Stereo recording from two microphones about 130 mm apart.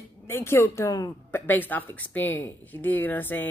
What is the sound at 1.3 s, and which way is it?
Speech, 15° left (ahead or behind).